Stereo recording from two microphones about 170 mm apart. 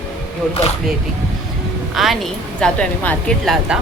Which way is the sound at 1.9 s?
Centre (ahead or behind).